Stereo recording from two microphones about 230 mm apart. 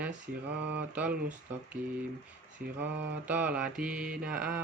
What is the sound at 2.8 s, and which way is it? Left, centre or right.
Mantra, centre.